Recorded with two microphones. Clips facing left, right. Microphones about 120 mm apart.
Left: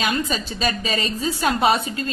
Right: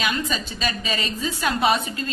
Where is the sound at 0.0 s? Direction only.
40° left (ahead or behind).